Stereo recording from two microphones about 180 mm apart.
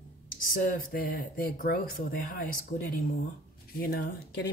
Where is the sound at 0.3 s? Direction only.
50° left (ahead or behind).